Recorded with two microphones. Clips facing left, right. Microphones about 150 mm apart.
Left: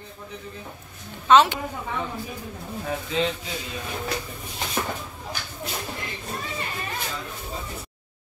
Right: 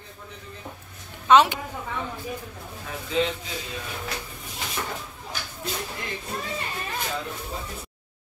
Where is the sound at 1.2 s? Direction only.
15° right (ahead or behind).